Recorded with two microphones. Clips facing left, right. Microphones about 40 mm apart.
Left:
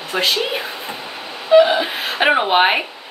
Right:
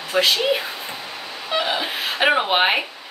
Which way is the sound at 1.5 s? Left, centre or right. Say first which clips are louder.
Left 11 dB; centre.